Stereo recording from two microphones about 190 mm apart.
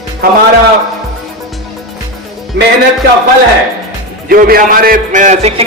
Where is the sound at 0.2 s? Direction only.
50° right (ahead or behind).